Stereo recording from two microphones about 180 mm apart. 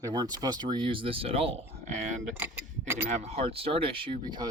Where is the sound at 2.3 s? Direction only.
15° right (ahead or behind).